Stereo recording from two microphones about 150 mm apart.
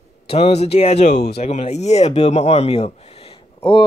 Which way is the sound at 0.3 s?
45° left (ahead or behind).